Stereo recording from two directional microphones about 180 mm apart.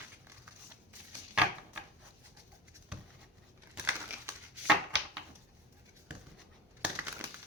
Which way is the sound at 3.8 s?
15° right (ahead or behind).